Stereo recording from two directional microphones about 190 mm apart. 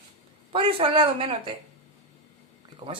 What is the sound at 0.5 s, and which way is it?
Speech, 30° right (ahead or behind).